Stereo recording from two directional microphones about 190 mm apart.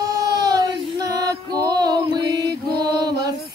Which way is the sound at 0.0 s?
20° right (ahead or behind).